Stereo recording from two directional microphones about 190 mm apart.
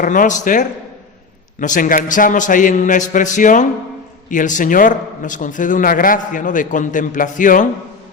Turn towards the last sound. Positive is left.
turn(degrees=45)  # may be behind; listen again after turning